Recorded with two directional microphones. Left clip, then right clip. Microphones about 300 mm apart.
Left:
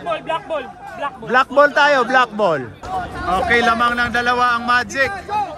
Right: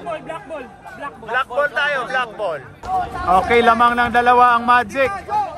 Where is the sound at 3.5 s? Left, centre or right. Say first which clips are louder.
Even; centre.